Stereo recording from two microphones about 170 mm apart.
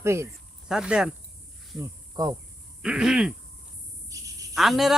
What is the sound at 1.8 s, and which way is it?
Cricket, 20° right (ahead or behind).